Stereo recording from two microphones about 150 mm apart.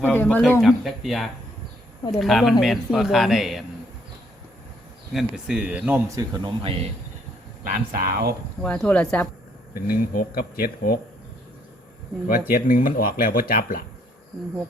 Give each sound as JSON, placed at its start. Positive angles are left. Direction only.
{"t": 0.0, "sound": "speech", "side_deg": 10}
{"t": 0.6, "sound": "speech", "side_deg": 0}
{"t": 5.1, "sound": "speech", "side_deg": -5}
{"t": 6.1, "sound": "speech", "side_deg": -25}
{"t": 7.6, "sound": "speech", "side_deg": -75}
{"t": 8.6, "sound": "speech", "side_deg": 5}
{"t": 9.8, "sound": "speech", "side_deg": 85}
{"t": 12.3, "sound": "speech", "side_deg": 75}